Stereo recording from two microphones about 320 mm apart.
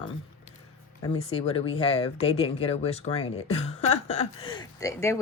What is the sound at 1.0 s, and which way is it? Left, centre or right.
Speech, centre.